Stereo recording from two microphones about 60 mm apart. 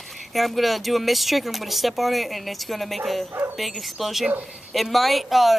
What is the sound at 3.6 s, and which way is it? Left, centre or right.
Speech, centre.